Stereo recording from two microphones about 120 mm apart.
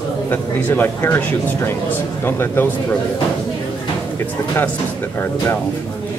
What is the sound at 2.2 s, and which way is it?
Speech, 20° left (ahead or behind).